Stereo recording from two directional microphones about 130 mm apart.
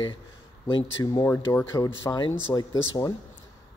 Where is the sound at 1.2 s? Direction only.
15° left (ahead or behind).